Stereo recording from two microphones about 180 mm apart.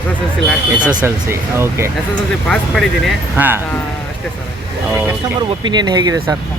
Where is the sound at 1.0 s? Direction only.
15° right (ahead or behind).